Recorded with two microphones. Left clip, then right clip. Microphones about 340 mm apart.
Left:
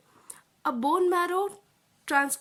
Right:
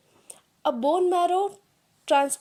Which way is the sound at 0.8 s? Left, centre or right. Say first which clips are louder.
Right 2 dB; centre.